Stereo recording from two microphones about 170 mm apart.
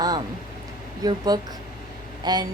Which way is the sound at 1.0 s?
25° right (ahead or behind).